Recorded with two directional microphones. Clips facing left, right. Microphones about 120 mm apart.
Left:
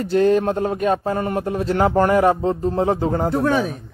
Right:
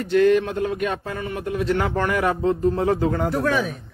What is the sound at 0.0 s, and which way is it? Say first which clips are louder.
Speech: left 1 dB; 35° left (ahead or behind).